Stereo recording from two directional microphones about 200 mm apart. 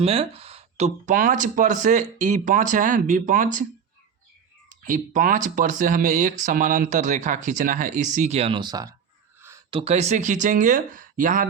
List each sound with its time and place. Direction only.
0.0 s speech: 30° right (ahead or behind)
4.7 s speech: 40° right (ahead or behind)